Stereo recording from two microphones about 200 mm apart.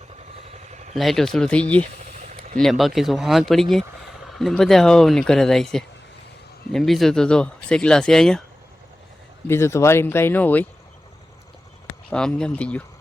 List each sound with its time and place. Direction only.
0.7 s vehicle: 35° right (ahead or behind)
0.9 s speech: centre (ahead or behind)
9.5 s speech: 15° left (ahead or behind)
12.1 s speech: 5° left (ahead or behind)